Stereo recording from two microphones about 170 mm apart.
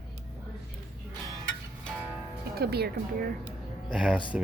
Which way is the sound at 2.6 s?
70° right (ahead or behind).